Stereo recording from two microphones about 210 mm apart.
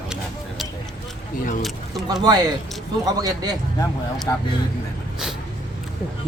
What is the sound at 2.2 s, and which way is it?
A man's voice, 20° right (ahead or behind).